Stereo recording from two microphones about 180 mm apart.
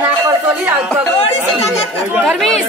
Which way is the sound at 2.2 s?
5° left (ahead or behind).